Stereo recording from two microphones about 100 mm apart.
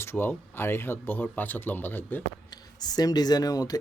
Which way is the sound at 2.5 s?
45° left (ahead or behind).